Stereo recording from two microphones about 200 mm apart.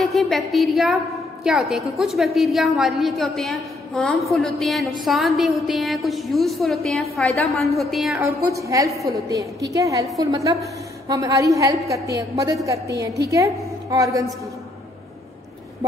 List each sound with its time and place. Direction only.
0.0 s a woman's voice: centre (ahead or behind)
8.2 s a woman's voice: 15° right (ahead or behind)